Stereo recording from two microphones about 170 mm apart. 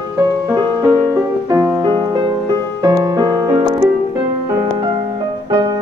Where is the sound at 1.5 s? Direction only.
15° right (ahead or behind).